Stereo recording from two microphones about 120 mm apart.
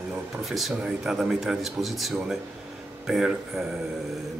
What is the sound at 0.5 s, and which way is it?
A man's voice, centre (ahead or behind).